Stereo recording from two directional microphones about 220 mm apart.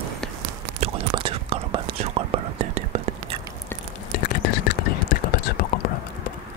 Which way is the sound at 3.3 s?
25° right (ahead or behind).